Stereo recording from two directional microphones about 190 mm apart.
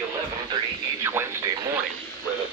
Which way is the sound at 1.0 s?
15° right (ahead or behind).